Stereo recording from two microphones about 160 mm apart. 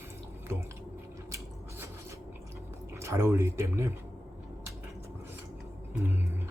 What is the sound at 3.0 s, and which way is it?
Speech, 15° right (ahead or behind).